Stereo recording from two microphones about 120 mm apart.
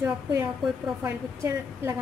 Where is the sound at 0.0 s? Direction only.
20° right (ahead or behind).